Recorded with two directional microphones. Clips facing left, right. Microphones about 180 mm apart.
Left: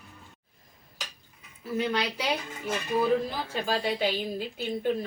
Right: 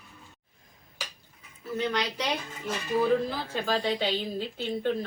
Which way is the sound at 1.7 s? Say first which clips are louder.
Left 1 dB; 10° left (ahead or behind).